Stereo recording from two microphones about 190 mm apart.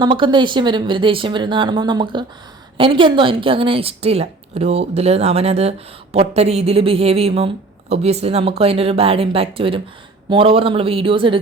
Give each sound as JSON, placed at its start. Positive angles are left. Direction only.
{"t": 0.0, "sound": "a woman's voice", "side_deg": -25}